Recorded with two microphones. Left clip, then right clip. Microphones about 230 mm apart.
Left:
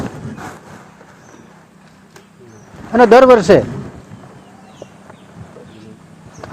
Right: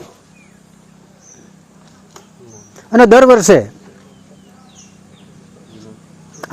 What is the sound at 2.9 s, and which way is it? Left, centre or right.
Speech, right.